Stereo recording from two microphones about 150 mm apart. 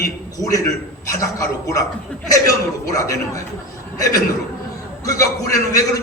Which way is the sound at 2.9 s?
20° left (ahead or behind).